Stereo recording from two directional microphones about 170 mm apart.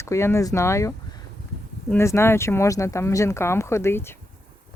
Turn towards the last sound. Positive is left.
turn(degrees=15)  # may be behind; listen again after turning